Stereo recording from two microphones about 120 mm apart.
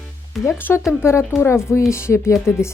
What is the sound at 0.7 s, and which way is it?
Speech, 15° left (ahead or behind).